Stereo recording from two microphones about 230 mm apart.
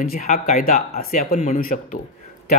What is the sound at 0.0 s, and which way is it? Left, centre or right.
Speech, left.